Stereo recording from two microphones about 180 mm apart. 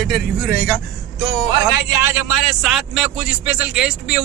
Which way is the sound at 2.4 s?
Centre (ahead or behind).